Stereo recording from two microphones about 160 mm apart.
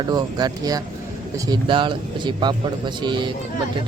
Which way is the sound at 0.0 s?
25° right (ahead or behind).